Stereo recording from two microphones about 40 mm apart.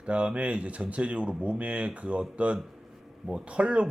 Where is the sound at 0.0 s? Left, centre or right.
Right.